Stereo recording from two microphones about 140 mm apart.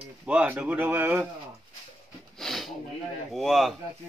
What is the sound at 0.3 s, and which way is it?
Speech, 10° right (ahead or behind).